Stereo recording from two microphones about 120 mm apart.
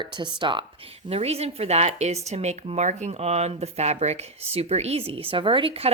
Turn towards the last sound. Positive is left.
turn(degrees=-50)  # may be behind; listen again after turning